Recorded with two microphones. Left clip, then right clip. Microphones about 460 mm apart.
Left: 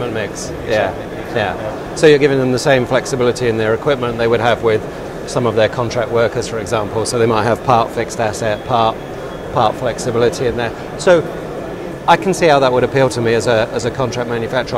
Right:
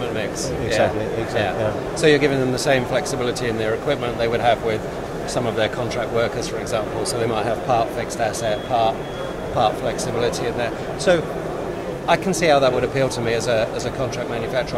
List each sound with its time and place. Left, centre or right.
2.0 s speech: left